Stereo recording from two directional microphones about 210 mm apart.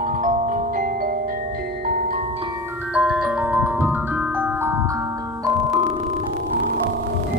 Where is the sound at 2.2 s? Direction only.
25° right (ahead or behind).